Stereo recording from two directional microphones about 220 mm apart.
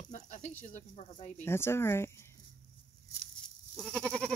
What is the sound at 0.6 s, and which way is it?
Speech, 35° left (ahead or behind).